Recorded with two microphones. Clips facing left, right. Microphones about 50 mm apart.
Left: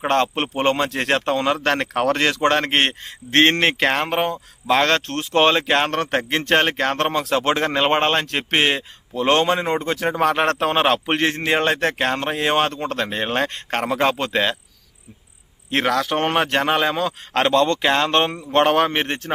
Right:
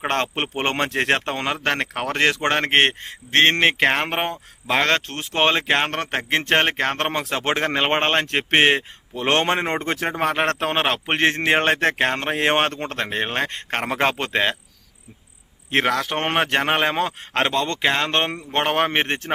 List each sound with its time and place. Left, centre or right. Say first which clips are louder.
0.1 s a man's voice: left 7 dB; right
1.5 s speech: left 3 dB; centre
2.1 s speech: right 3 dB; right
4.0 s a man's voice: left 3 dB; right
4.7 s a man's voice: left 2 dB; centre; by 10.1 s right
10.1 s speech: left 4 dB; centre
11.2 s a man's voice: right 1 dB; right; by 13.8 s centre
13.8 s a man's voice: left 2 dB; right
15.7 s speech: left 1 dB; centre; by 17.2 s right
17.3 s speech: left 5 dB; centre
17.8 s speech: left 2 dB; centre
18.1 s speech: left 4 dB; right
18.9 s a man's voice: right 1 dB; right